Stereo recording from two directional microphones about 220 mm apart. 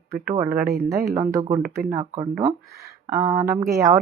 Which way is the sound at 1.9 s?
30° right (ahead or behind).